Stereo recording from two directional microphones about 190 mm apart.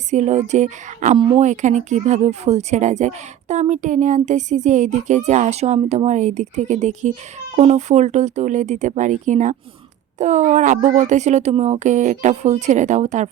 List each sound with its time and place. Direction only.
0.1 s speech: 35° right (ahead or behind)